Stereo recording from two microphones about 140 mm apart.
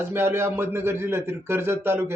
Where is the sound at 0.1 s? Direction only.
15° right (ahead or behind).